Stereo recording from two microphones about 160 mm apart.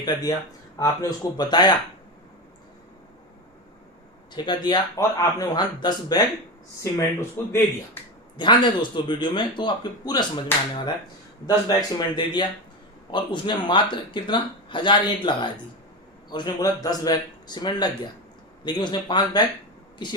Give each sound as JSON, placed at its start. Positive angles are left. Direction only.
{"t": 0.0, "sound": "speech", "side_deg": 25}
{"t": 4.4, "sound": "speech", "side_deg": 25}
{"t": 8.4, "sound": "speech", "side_deg": 30}
{"t": 11.4, "sound": "speech", "side_deg": 25}